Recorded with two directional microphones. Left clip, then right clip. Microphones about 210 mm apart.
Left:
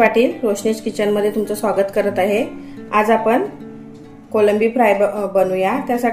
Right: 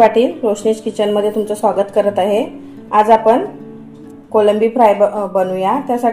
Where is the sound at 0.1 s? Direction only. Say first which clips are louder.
Right 2 dB; 5° left (ahead or behind).